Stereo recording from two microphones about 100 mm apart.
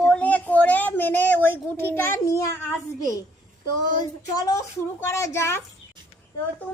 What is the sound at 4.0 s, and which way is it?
Speech, 40° left (ahead or behind).